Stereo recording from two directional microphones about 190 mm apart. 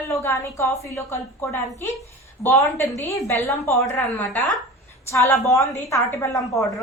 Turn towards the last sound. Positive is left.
turn(degrees=20)  # may be behind; listen again after turning